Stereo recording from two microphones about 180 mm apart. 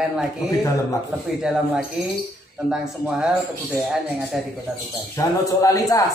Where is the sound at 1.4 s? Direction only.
5° right (ahead or behind).